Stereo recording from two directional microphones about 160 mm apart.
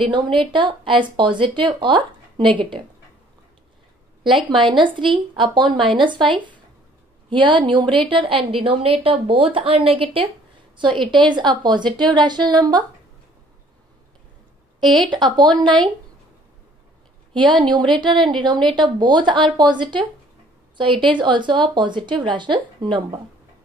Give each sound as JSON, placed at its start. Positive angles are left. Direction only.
{"t": 0.1, "sound": "a woman's voice", "side_deg": -30}
{"t": 4.2, "sound": "a woman's voice", "side_deg": -30}
{"t": 14.8, "sound": "a woman's voice", "side_deg": 0}
{"t": 15.0, "sound": "a woman's voice", "side_deg": -30}
{"t": 17.4, "sound": "a woman's voice", "side_deg": -30}